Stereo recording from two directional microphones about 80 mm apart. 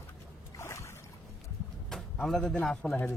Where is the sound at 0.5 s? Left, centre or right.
Left.